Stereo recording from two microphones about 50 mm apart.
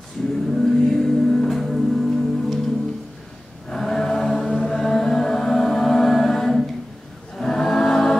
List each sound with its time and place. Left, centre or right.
0.5 s music: centre
3.7 s a sound: centre
4.5 s music: centre
7.3 s choir: centre